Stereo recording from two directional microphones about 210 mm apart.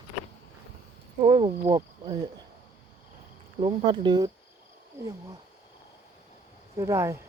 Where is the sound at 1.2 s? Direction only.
25° right (ahead or behind).